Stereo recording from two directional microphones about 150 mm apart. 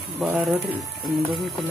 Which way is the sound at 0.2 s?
Centre (ahead or behind).